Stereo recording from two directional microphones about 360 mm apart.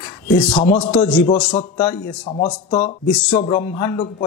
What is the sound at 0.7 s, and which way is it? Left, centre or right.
A man's voice, centre.